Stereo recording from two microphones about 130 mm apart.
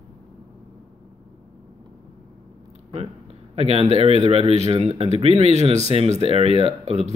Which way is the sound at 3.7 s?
50° right (ahead or behind).